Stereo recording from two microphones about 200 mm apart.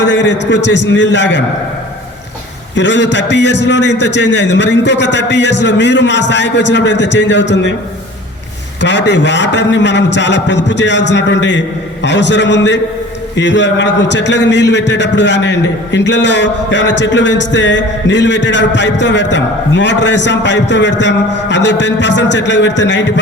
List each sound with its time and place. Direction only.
0.0 s speech: 60° left (ahead or behind)
2.7 s speech: 65° left (ahead or behind)
8.8 s speech: 60° left (ahead or behind)